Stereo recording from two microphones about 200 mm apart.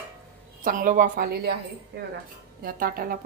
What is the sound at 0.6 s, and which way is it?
Speech, 40° right (ahead or behind).